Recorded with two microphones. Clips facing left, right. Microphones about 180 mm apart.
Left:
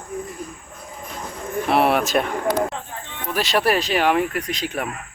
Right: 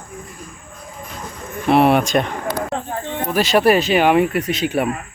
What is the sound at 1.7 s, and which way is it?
Speech, centre (ahead or behind).